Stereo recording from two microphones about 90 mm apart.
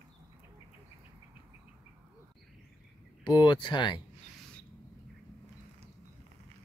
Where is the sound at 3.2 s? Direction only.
60° left (ahead or behind).